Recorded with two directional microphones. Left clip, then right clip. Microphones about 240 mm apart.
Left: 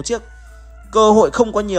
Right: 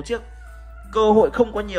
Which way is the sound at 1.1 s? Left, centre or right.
Right.